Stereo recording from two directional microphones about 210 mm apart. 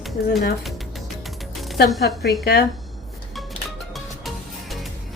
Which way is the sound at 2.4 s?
50° left (ahead or behind).